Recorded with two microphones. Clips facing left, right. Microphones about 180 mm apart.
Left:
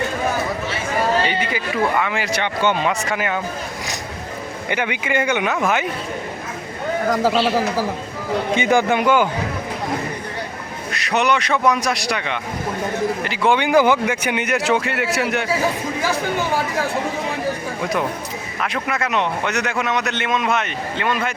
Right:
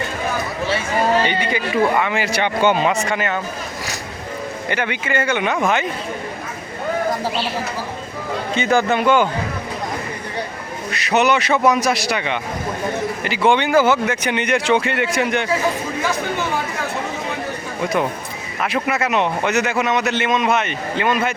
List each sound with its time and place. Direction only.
1.3 s a man's voice: 5° left (ahead or behind)
4.7 s a man's voice: 15° left (ahead or behind)
7.1 s speech: 90° left
8.5 s a man's voice: 15° left (ahead or behind)
10.9 s a man's voice: centre (ahead or behind)
13.6 s a man's voice: 15° left (ahead or behind)
18.6 s a man's voice: 5° right (ahead or behind)